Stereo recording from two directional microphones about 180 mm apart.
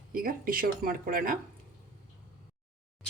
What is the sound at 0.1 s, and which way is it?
Speech, 50° right (ahead or behind).